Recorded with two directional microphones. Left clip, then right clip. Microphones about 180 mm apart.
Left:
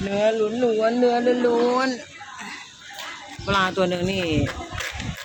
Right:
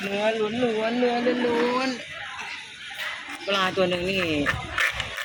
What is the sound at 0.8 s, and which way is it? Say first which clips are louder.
Speech: left 5 dB; 20° left (ahead or behind).